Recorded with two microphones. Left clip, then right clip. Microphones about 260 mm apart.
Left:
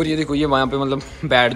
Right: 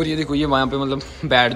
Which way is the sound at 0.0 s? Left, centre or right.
Centre.